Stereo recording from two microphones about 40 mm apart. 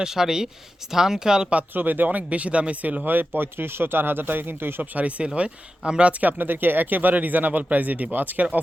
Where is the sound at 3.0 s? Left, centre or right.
Right.